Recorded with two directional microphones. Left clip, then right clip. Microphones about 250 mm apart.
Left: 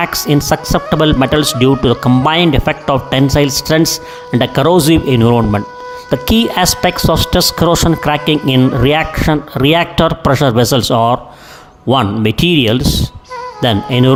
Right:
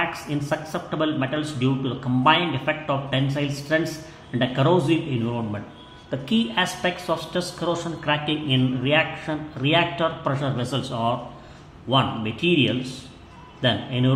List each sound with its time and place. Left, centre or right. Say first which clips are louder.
0.0 s speech: left 12 dB; left